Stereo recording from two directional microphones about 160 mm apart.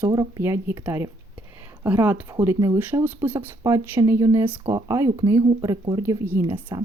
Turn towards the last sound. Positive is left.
turn(degrees=-30)  # may be behind; listen again after turning